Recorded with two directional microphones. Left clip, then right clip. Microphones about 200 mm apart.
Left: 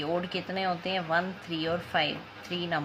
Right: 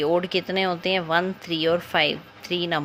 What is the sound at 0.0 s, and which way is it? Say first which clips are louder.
Speech: right 9 dB; 45° right (ahead or behind).